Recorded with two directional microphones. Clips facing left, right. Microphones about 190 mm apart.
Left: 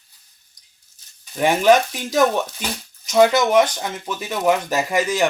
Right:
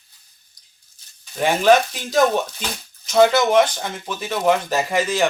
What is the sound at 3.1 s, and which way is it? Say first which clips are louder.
Speech: even; 15° left (ahead or behind).